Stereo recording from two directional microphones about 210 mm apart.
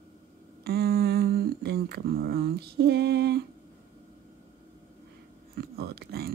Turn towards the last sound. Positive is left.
turn(degrees=-50)  # may be behind; listen again after turning